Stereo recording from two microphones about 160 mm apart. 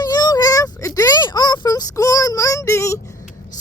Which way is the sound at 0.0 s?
25° left (ahead or behind).